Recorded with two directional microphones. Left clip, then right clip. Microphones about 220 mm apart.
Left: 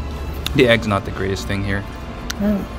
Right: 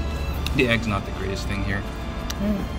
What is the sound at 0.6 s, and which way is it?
Speech, 30° left (ahead or behind).